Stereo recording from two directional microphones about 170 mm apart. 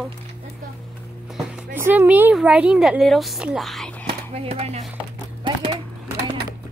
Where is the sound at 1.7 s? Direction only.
10° right (ahead or behind).